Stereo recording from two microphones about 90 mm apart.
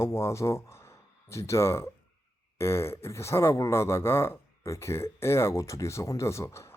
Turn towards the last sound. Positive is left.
turn(degrees=30)  # may be behind; listen again after turning